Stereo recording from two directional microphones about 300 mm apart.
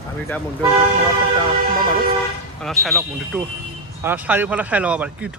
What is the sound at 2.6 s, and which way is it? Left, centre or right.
Speech, centre.